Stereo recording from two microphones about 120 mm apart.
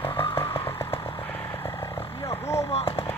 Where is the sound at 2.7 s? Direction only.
55° left (ahead or behind).